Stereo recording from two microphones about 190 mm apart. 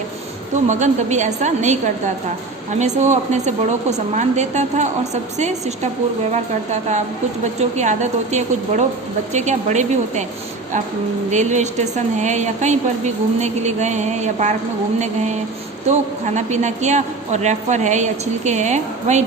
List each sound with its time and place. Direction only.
0.7 s a woman's voice: 40° right (ahead or behind)
11.3 s a woman's voice: 40° right (ahead or behind)